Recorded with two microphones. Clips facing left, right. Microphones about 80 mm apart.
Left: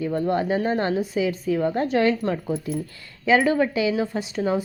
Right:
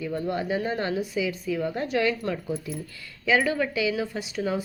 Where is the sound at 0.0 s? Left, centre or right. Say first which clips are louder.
Left 5 dB; left.